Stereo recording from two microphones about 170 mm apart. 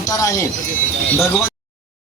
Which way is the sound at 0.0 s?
20° left (ahead or behind).